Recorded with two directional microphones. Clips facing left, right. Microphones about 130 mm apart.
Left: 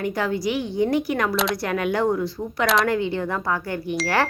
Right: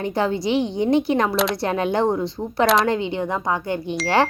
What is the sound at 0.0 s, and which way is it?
Speech, 25° right (ahead or behind).